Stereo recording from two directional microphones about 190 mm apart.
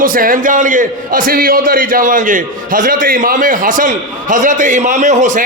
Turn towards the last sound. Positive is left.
turn(degrees=-40)  # may be behind; listen again after turning